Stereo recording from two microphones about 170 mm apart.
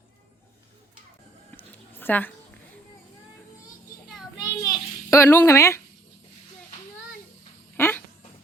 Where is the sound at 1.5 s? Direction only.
10° left (ahead or behind).